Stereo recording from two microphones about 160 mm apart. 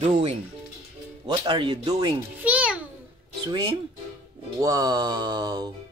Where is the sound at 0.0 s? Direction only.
40° right (ahead or behind).